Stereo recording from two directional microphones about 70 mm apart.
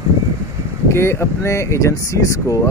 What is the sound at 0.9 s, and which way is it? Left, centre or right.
Speech, left.